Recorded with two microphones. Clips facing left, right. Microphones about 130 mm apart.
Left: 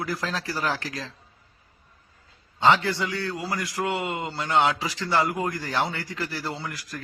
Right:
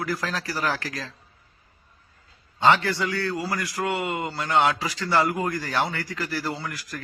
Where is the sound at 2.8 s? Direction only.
20° left (ahead or behind).